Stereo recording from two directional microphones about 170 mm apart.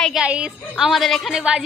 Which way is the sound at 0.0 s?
5° right (ahead or behind).